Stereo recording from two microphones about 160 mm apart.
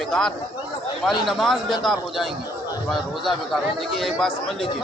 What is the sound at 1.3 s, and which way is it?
Speech, centre (ahead or behind).